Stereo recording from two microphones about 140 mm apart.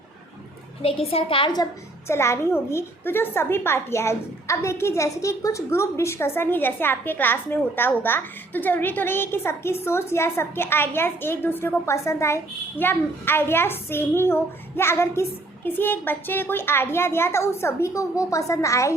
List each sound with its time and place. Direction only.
0.8 s a woman's voice: 40° left (ahead or behind)
2.0 s a woman's voice: 20° left (ahead or behind)